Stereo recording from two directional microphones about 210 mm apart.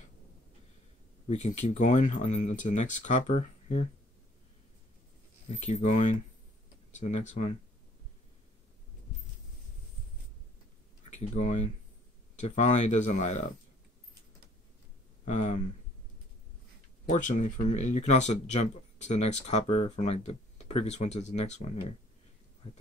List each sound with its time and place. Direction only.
1.3 s speech: 30° left (ahead or behind)
5.7 s speech: 30° left (ahead or behind)
11.1 s speech: 35° left (ahead or behind)
15.2 s speech: 35° left (ahead or behind)
17.1 s speech: 35° left (ahead or behind)